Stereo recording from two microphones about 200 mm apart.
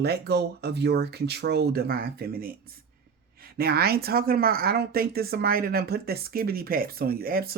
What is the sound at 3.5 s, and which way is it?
A woman's voice, 50° right (ahead or behind).